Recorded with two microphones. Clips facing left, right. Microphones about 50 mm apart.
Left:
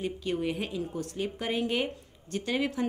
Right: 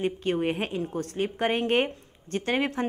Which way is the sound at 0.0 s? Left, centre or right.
Right.